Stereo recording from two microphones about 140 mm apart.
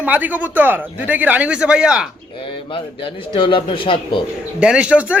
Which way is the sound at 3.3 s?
35° left (ahead or behind).